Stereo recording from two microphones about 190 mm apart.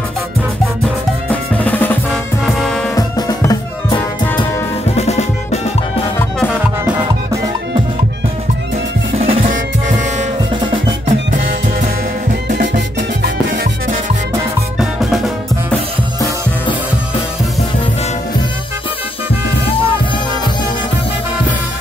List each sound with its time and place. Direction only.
1.3 s drum: 10° left (ahead or behind)
2.0 s music: centre (ahead or behind)
2.9 s music: 20° left (ahead or behind)
4.9 s music: 35° left (ahead or behind)
9.2 s music: 35° right (ahead or behind)
10.5 s drum: 25° right (ahead or behind)
12.4 s music: 55° right (ahead or behind)
14.8 s music: centre (ahead or behind)